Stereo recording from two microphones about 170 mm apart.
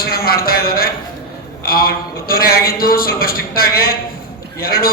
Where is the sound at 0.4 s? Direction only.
60° left (ahead or behind).